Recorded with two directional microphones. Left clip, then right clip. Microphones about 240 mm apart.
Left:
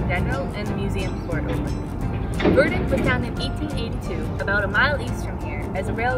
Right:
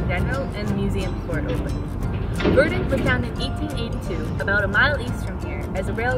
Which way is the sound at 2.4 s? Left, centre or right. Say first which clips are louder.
Even; left.